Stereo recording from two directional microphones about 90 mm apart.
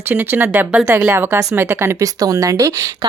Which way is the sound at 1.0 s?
30° right (ahead or behind).